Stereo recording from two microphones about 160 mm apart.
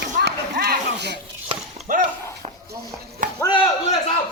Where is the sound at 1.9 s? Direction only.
60° right (ahead or behind).